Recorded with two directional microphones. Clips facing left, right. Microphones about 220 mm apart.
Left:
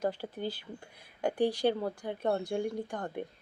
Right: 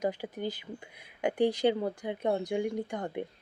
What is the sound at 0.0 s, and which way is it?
Speech, 15° right (ahead or behind).